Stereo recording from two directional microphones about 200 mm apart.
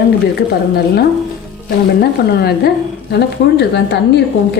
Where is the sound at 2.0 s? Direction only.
50° left (ahead or behind).